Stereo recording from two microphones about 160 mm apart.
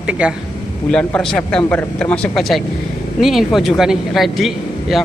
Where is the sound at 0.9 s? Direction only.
5° left (ahead or behind).